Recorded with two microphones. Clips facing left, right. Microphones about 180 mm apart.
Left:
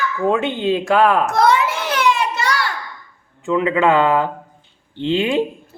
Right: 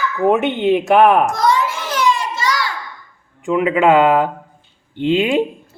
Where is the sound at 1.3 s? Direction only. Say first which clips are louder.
Left 1 dB; 60° left (ahead or behind).